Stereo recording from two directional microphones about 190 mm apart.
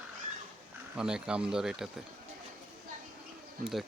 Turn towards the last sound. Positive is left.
turn(degrees=0)  # may be behind; listen again after turning